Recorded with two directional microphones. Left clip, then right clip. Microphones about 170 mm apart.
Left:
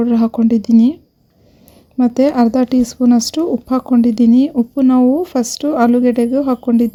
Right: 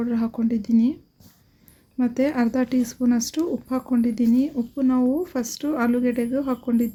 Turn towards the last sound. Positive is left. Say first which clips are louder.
# left 9 dB
turn(degrees=35)  # may be behind; listen again after turning